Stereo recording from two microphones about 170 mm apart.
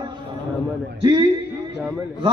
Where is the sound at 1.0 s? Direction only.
30° right (ahead or behind).